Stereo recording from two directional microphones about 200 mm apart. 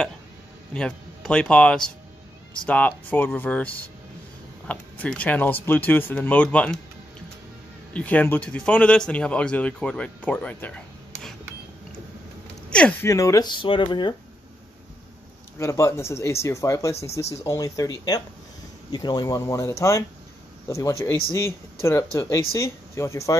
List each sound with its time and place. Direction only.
0.7 s a man's voice: 5° left (ahead or behind)
7.9 s a man's voice: 5° left (ahead or behind)
12.6 s speech: 5° left (ahead or behind)
13.1 s speech: 15° left (ahead or behind)
15.6 s a man's voice: 15° left (ahead or behind)